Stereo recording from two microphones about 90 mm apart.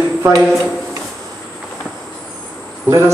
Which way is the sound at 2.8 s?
35° right (ahead or behind).